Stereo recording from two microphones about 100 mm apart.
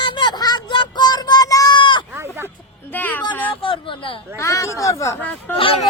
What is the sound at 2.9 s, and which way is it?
Speech, 20° left (ahead or behind).